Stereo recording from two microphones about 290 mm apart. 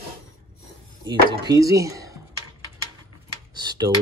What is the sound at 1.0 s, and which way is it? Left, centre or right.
Chopping, centre.